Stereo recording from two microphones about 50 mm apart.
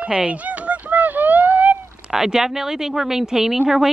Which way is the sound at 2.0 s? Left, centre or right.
Centre.